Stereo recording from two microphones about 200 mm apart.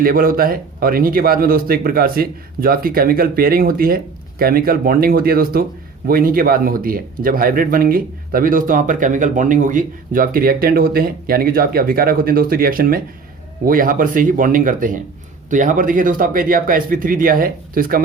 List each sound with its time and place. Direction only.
0.0 s speech: 45° right (ahead or behind)